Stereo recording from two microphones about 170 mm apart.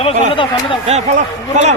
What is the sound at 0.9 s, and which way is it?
Speech, 40° right (ahead or behind).